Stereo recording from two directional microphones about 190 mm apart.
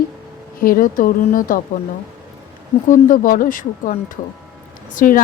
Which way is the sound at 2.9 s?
45° left (ahead or behind).